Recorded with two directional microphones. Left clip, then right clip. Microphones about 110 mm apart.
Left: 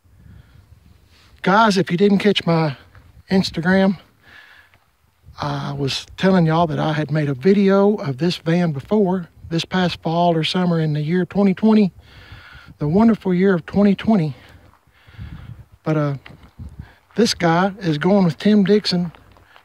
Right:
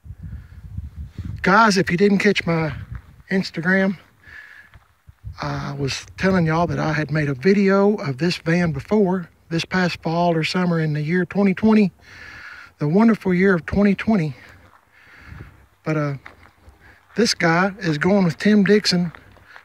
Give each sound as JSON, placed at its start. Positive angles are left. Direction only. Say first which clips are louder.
{"t": 1.4, "sound": "speech", "louder": "even", "side_deg": 0}
{"t": 5.9, "sound": "a man's voice", "louder": "left 3 dB", "side_deg": 20}
{"t": 15.8, "sound": "a man's voice", "louder": "left 2 dB", "side_deg": 20}